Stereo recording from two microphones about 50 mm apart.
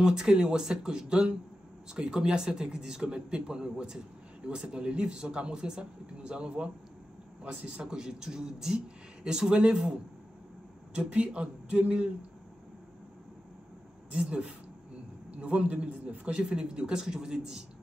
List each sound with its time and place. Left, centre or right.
0.0 s a man's voice: centre
14.1 s a man's voice: right